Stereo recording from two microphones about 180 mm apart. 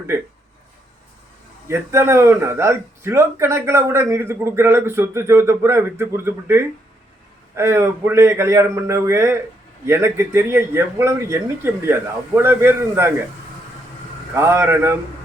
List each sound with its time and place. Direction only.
1.6 s speech: 15° right (ahead or behind)
14.3 s speech: 15° right (ahead or behind)